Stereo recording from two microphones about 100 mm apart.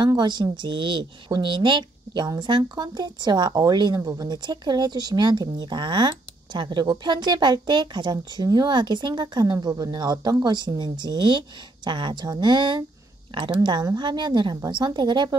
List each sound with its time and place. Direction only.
0.0 s a woman's voice: 50° right (ahead or behind)